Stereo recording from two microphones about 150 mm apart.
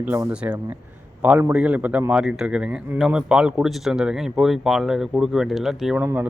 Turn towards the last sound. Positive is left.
turn(degrees=-5)  # may be behind; listen again after turning